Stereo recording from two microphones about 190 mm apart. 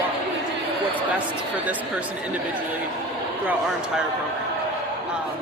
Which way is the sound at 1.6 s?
10° right (ahead or behind).